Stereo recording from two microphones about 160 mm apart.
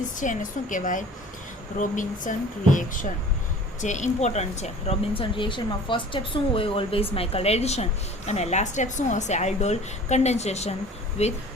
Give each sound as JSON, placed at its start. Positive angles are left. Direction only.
{"t": 0.0, "sound": "speech", "side_deg": 55}